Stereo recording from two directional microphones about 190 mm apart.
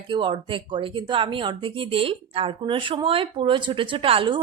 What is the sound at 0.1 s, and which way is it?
A woman's voice, 25° right (ahead or behind).